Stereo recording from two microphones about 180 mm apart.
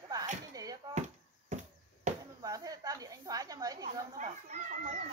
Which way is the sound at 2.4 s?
20° right (ahead or behind).